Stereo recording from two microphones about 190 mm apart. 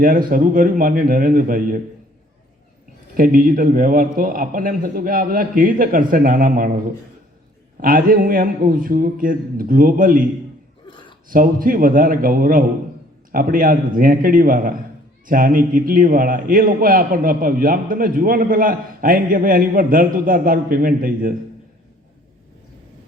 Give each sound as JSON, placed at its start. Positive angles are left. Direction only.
{"t": 0.0, "sound": "a man's voice", "side_deg": -45}
{"t": 3.2, "sound": "a man's voice", "side_deg": -45}
{"t": 7.8, "sound": "a man's voice", "side_deg": -45}
{"t": 10.8, "sound": "a sound", "side_deg": 25}
{"t": 11.3, "sound": "a man's voice", "side_deg": -45}